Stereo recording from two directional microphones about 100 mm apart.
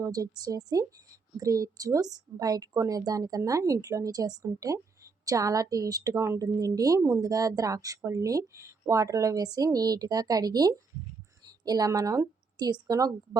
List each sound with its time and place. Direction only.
0.0 s a woman's voice: 40° right (ahead or behind)